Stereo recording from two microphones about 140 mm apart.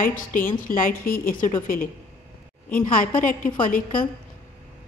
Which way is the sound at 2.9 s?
70° left (ahead or behind).